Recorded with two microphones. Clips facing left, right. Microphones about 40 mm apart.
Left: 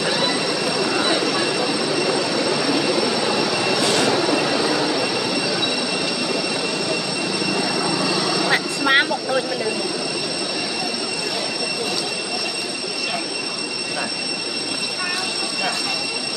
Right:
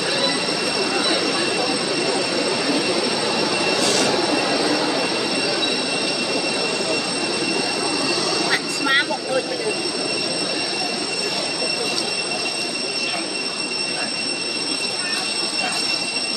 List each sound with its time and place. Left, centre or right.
0.9 s vehicle: centre
3.8 s vehicle: left
4.1 s vehicle: centre
8.5 s vehicle: left